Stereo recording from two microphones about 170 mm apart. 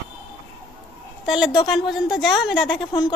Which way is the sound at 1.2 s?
Centre (ahead or behind).